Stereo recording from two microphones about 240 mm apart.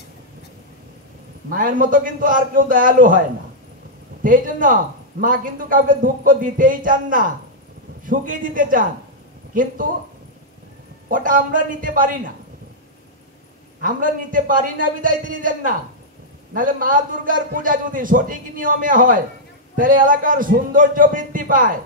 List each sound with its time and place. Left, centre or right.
1.5 s a man's voice: right
4.2 s a man's voice: right
11.1 s a man's voice: right
13.8 s a man's voice: right